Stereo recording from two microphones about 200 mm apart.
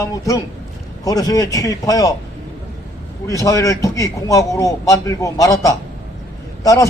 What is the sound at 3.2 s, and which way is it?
A man's voice, 15° left (ahead or behind).